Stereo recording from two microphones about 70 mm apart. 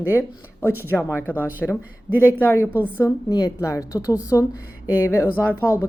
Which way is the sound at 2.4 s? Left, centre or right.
Left.